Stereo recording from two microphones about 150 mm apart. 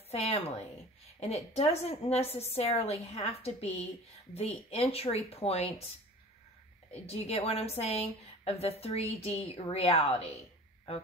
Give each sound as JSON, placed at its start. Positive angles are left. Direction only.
{"t": 0.1, "sound": "a woman's voice", "side_deg": 40}
{"t": 6.9, "sound": "a woman's voice", "side_deg": 45}